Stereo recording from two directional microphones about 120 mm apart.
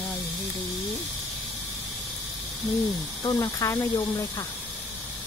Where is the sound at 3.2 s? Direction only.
30° left (ahead or behind).